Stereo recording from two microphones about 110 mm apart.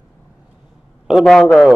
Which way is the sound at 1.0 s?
Centre (ahead or behind).